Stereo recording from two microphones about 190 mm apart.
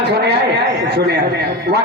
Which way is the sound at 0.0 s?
60° right (ahead or behind).